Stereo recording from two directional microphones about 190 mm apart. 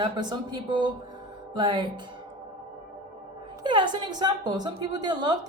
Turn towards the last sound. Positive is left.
turn(degrees=-20)  # may be behind; listen again after turning